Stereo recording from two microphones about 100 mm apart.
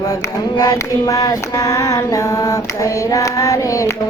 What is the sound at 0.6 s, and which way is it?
Female singing, 35° left (ahead or behind).